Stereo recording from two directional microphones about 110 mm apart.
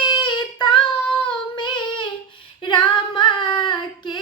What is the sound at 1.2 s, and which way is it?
Singing, 45° left (ahead or behind).